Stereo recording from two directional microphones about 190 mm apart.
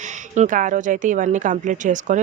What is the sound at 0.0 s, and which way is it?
A woman's voice, 40° right (ahead or behind).